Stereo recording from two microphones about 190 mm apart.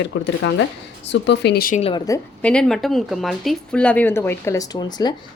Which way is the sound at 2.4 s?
5° left (ahead or behind).